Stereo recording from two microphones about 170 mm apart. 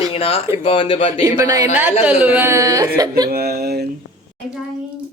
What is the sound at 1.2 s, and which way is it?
Speech, 20° right (ahead or behind).